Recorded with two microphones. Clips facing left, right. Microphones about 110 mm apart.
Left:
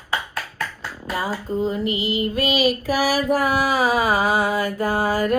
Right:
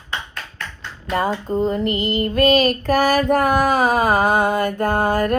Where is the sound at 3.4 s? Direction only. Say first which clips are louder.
Right 3 dB; 50° right (ahead or behind).